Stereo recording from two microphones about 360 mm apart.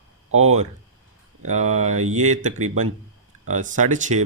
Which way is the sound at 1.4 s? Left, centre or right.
Centre.